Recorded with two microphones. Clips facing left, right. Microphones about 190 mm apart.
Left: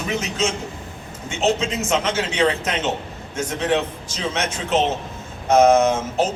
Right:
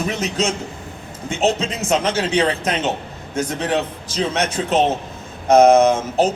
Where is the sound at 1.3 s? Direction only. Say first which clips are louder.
Right 1 dB; 35° right (ahead or behind).